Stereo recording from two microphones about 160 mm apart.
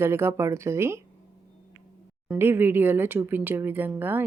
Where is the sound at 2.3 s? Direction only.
15° right (ahead or behind).